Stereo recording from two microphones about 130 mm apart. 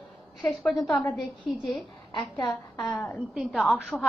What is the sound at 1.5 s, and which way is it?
Speech, centre (ahead or behind).